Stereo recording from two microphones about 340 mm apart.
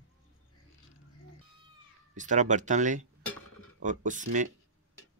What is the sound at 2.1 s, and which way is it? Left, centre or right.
Speech, right.